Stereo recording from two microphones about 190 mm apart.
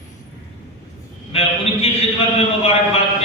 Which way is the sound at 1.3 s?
30° left (ahead or behind).